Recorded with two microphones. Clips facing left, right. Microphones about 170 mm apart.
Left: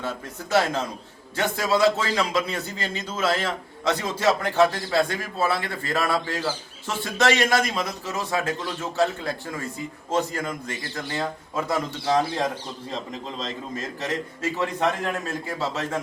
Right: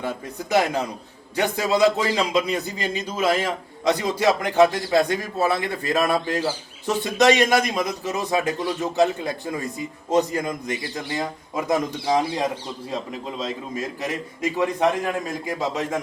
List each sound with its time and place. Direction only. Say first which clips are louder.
0.0 s a man's voice: right 3 dB; 15° right (ahead or behind)